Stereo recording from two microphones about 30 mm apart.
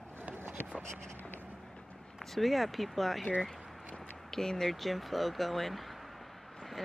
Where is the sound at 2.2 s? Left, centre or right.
Centre.